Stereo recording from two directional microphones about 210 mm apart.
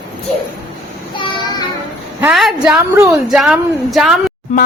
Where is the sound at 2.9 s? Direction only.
15° right (ahead or behind).